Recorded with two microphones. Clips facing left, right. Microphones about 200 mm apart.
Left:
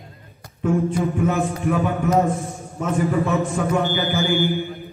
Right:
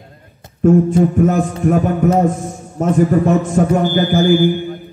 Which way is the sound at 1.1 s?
40° right (ahead or behind).